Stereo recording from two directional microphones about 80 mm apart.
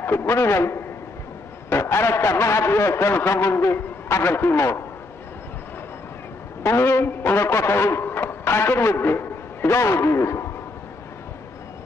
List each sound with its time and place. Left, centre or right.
0.0 s a man's voice: left
6.6 s a man's voice: left